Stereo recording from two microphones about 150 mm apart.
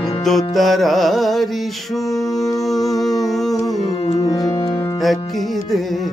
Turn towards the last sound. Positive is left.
turn(degrees=0)  # may be behind; listen again after turning